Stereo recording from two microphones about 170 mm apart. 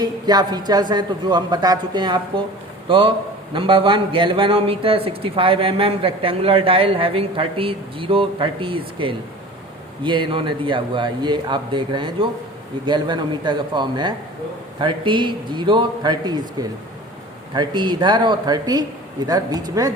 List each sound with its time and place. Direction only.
0.0 s speech: 25° right (ahead or behind)
3.5 s a man's voice: 30° right (ahead or behind)